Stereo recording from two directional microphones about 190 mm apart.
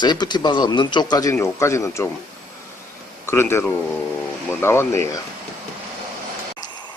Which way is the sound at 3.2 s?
15° left (ahead or behind).